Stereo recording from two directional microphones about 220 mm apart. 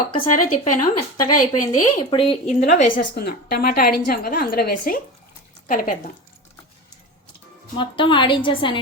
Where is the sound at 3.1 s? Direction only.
45° left (ahead or behind).